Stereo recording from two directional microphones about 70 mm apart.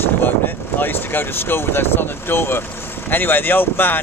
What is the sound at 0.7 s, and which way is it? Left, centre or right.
Speech, left.